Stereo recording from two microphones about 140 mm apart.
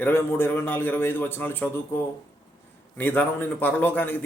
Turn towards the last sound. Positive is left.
turn(degrees=15)  # may be behind; listen again after turning